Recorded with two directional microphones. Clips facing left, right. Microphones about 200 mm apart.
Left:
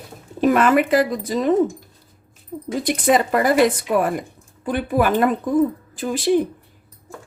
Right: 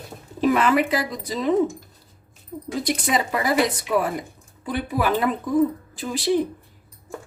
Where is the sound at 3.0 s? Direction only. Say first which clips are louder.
Left 8 dB; 55° left (ahead or behind).